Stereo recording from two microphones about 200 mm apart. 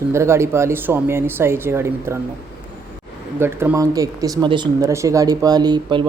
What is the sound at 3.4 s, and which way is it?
Speech, 10° right (ahead or behind).